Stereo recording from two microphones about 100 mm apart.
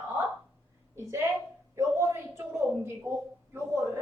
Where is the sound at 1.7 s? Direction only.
25° right (ahead or behind).